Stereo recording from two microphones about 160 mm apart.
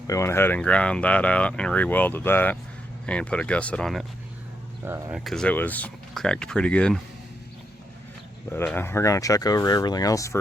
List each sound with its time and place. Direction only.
0.1 s speech: 15° left (ahead or behind)
4.9 s speech: 10° right (ahead or behind)
5.2 s speech: 5° left (ahead or behind)
8.4 s speech: 15° left (ahead or behind)